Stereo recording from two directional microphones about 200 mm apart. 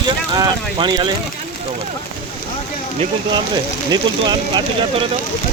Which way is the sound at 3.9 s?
20° right (ahead or behind).